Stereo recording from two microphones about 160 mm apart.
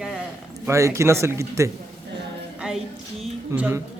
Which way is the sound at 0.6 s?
15° right (ahead or behind).